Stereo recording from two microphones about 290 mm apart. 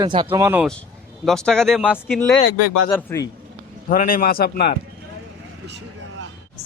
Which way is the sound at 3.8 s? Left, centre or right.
Left.